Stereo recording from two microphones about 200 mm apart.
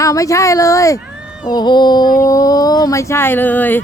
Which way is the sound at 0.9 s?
5° right (ahead or behind).